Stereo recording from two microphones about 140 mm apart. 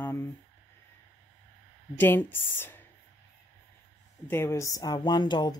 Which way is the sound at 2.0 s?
15° left (ahead or behind).